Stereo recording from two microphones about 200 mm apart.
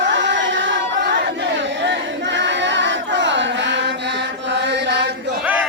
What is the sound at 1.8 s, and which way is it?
Choir, 60° right (ahead or behind).